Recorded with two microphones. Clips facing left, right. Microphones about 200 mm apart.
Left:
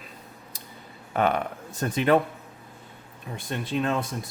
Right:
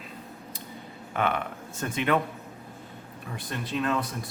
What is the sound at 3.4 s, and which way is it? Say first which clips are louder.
Speech: left 3 dB; 25° left (ahead or behind).